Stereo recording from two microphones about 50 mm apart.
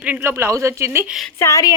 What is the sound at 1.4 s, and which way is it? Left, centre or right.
Speech, left.